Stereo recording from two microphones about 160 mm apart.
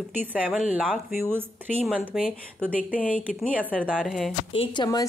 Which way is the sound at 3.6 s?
10° left (ahead or behind).